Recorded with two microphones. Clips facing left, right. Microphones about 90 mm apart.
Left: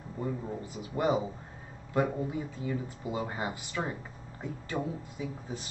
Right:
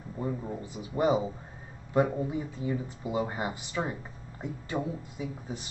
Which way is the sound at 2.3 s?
25° right (ahead or behind).